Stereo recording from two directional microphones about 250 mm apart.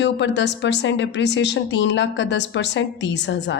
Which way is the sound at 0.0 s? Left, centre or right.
Left.